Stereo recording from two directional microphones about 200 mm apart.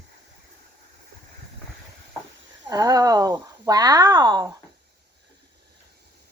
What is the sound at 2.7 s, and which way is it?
Speech, 20° right (ahead or behind).